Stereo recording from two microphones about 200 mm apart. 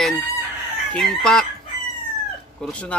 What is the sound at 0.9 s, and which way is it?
Speech, 5° left (ahead or behind).